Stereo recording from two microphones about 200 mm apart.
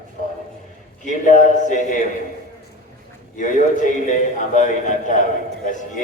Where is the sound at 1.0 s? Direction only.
40° left (ahead or behind).